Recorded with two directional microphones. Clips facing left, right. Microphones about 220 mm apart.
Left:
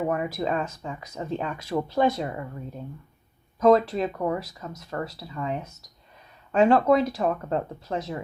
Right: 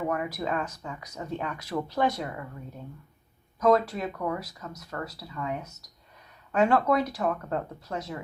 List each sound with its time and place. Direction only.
0.0 s speech: 25° left (ahead or behind)
3.6 s speech: 25° left (ahead or behind)